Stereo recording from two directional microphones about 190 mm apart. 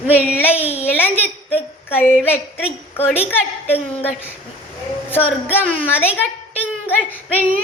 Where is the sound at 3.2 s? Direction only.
10° left (ahead or behind).